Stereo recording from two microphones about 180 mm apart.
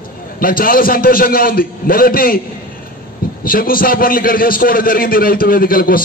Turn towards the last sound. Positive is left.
turn(degrees=55)  # may be behind; listen again after turning